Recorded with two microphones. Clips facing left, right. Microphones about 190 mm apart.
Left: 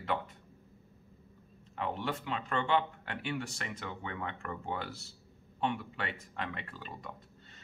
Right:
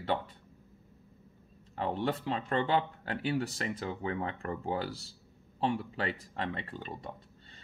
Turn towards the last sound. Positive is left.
turn(degrees=-30)  # may be behind; listen again after turning